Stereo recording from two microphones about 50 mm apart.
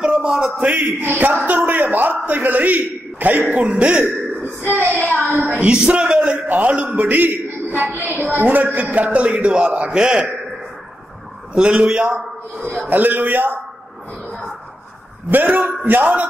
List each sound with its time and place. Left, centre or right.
0.0 s a sound: centre
0.6 s a man's voice: right
3.5 s a man's voice: right
5.1 s speech: right
5.5 s a man's voice: centre
6.4 s a man's voice: right
8.0 s a man's voice: right; by 10.2 s centre
11.5 s a man's voice: right
12.9 s speech: right
15.3 s speech: right